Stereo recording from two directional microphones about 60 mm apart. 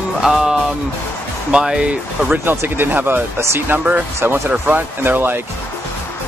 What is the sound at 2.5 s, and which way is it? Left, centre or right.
Speech, right.